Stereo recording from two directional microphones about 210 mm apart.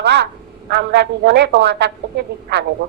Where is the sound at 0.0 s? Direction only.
55° right (ahead or behind).